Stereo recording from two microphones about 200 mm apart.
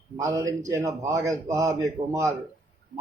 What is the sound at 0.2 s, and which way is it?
Speech, 15° right (ahead or behind).